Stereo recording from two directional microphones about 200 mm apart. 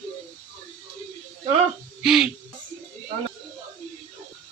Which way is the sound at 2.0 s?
Centre (ahead or behind).